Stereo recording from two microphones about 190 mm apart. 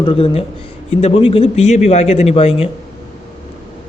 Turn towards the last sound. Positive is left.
turn(degrees=30)  # may be behind; listen again after turning